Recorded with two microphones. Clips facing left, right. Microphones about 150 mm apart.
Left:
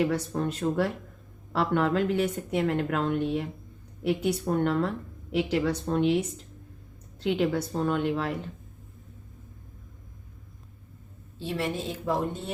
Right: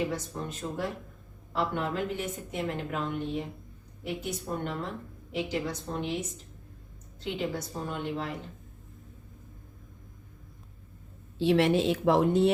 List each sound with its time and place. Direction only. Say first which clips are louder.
0.0 s a woman's voice: left 6 dB; 70° left (ahead or behind)
11.3 s a woman's voice: right 8 dB; 75° right (ahead or behind)